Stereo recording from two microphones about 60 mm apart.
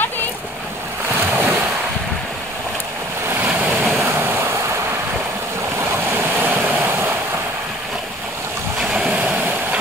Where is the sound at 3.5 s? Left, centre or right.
Right.